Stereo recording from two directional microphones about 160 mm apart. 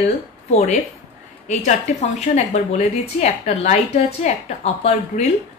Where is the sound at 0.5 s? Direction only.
45° left (ahead or behind).